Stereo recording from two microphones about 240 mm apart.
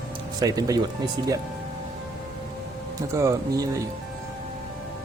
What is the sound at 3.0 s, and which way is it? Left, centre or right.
Speech, centre.